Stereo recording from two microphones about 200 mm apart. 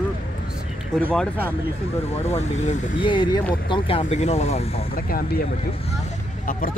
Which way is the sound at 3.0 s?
25° left (ahead or behind).